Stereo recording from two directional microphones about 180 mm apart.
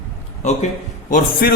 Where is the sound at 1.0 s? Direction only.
50° left (ahead or behind).